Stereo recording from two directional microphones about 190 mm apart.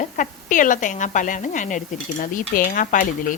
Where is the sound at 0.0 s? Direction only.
40° left (ahead or behind).